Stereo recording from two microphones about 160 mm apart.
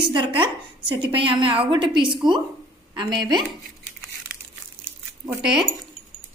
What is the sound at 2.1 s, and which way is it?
Speech, 30° right (ahead or behind).